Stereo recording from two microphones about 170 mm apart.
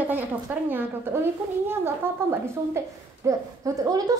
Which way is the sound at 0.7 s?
10° right (ahead or behind).